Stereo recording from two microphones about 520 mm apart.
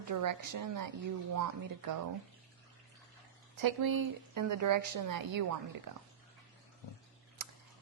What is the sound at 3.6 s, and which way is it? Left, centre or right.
A woman's voice, right.